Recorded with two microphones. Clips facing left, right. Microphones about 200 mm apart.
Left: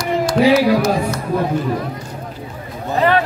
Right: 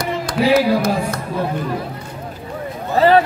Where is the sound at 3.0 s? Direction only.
30° right (ahead or behind).